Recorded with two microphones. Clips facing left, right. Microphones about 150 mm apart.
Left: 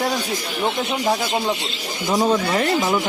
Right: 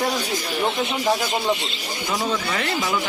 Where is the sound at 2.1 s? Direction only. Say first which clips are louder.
Left 7 dB; 30° left (ahead or behind).